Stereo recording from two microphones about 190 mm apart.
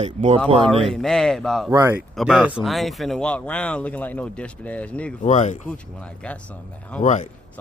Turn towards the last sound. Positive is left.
turn(degrees=40)  # may be behind; listen again after turning